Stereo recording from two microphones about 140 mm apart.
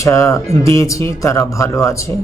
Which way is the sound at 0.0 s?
20° left (ahead or behind).